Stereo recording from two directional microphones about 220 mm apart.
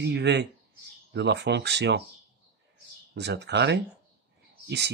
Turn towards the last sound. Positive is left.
turn(degrees=-50)  # may be behind; listen again after turning